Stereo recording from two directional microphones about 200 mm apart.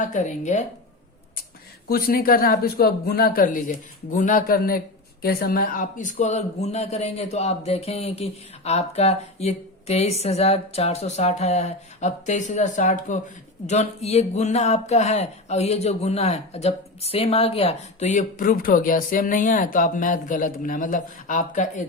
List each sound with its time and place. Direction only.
0.0 s speech: 40° left (ahead or behind)
1.9 s speech: 45° left (ahead or behind)